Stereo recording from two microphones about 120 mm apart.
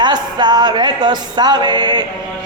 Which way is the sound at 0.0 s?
35° right (ahead or behind).